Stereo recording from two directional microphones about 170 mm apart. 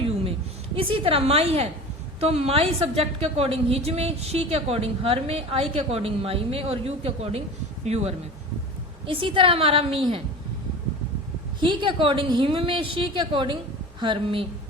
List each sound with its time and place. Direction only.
0.8 s a woman's voice: 30° right (ahead or behind)
11.6 s a woman's voice: 30° right (ahead or behind)